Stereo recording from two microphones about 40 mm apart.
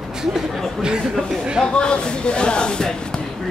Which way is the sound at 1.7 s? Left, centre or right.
Left.